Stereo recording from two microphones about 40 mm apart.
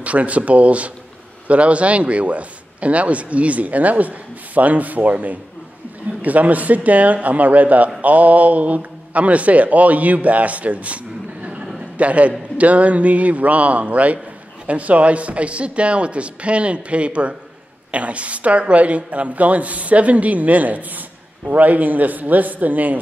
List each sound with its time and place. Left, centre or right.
0.0 s speech: right
12.0 s a man's voice: right